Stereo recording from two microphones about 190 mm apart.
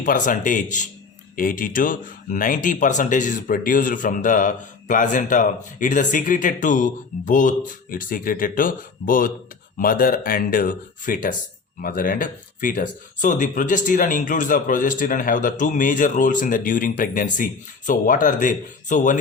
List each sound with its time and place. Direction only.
0.0 s speech: 45° left (ahead or behind)